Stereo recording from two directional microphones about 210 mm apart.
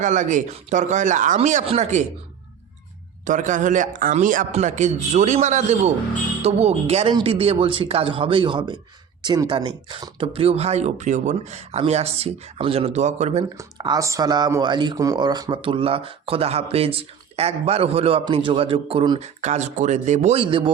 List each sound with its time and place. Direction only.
0.0 s a man's voice: 35° right (ahead or behind)
3.2 s a man's voice: 35° right (ahead or behind)
13.6 s a man's voice: 20° right (ahead or behind)